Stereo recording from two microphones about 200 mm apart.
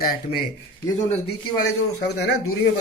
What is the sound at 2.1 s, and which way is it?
Speech, 55° left (ahead or behind).